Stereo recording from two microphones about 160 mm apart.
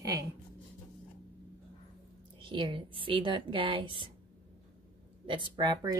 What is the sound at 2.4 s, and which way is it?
A woman's voice, 30° right (ahead or behind).